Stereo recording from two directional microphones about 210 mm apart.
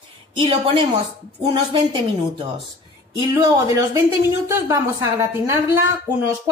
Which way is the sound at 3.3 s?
15° right (ahead or behind).